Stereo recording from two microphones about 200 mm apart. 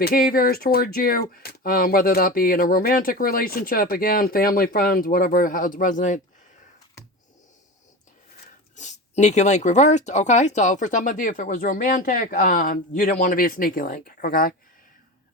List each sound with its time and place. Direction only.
0.0 s speech: 45° left (ahead or behind)
8.7 s speech: 35° left (ahead or behind)